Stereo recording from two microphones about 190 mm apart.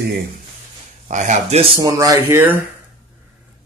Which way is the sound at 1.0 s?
40° right (ahead or behind).